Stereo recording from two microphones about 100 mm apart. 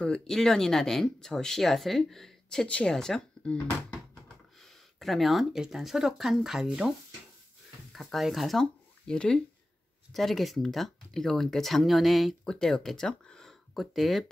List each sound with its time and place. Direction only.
0.0 s speech: 5° left (ahead or behind)